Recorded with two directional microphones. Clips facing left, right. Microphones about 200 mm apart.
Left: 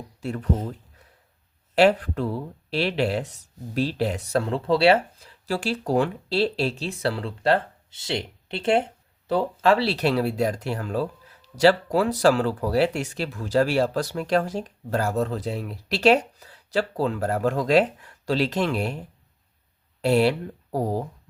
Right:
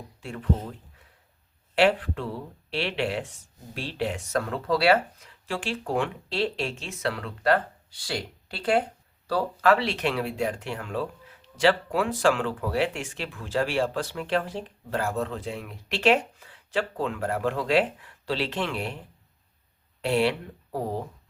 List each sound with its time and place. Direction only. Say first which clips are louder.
1.7 s speech: left 4 dB; 40° left (ahead or behind)
5.5 s speech: left 5 dB; 40° left (ahead or behind)
20.0 s speech: left 4 dB; 40° left (ahead or behind)